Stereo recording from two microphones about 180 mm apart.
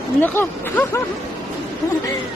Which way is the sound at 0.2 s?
10° left (ahead or behind).